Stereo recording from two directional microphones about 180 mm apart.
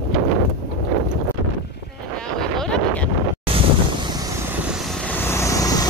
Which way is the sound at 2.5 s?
5° left (ahead or behind).